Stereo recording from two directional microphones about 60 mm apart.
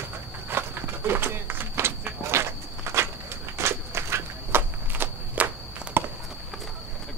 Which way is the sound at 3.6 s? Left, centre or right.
Right.